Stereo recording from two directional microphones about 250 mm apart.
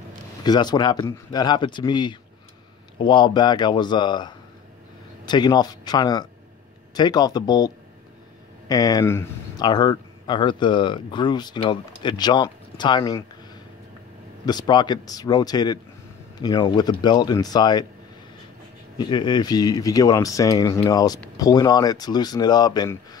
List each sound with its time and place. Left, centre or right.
0.4 s speech: centre
14.4 s speech: centre
18.9 s speech: centre